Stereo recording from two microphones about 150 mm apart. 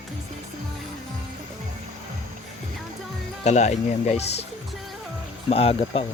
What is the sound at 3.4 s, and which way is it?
Speech, 50° left (ahead or behind).